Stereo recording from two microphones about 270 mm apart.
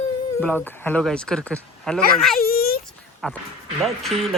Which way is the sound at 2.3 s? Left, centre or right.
Left.